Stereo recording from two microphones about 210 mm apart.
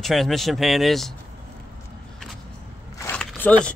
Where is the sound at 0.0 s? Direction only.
Centre (ahead or behind).